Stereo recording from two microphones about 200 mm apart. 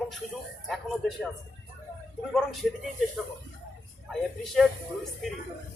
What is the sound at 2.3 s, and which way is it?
Speech, centre (ahead or behind).